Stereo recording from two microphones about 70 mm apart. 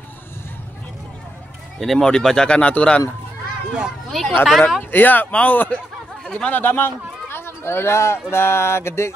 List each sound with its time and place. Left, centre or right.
1.8 s speech: centre
4.1 s speech: centre
4.9 s speech: left